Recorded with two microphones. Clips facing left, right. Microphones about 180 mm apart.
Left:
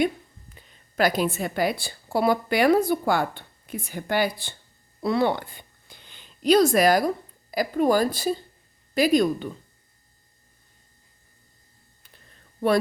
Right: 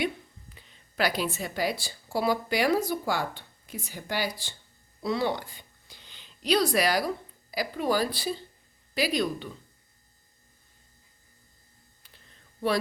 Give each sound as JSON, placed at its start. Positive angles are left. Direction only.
{"t": 0.5, "sound": "a woman's voice", "side_deg": 45}